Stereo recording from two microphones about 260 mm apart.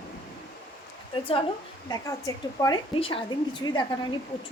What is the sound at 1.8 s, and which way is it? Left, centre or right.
A woman's voice, centre.